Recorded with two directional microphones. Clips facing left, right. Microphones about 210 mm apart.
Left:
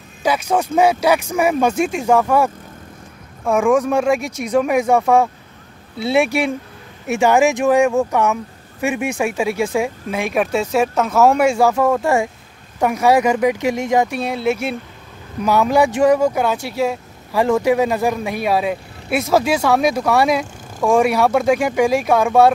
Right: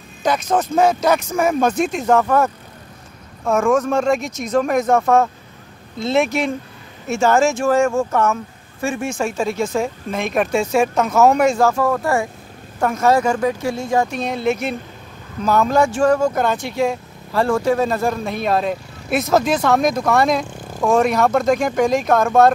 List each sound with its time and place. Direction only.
0.2 s speech: 10° left (ahead or behind)
3.7 s speech: 10° left (ahead or behind)
12.0 s speech: 25° left (ahead or behind)
12.8 s speech: 10° left (ahead or behind)